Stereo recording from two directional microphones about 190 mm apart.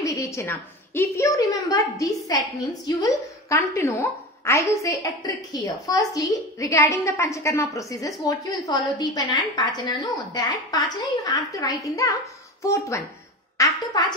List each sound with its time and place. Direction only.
0.1 s a woman's voice: 15° left (ahead or behind)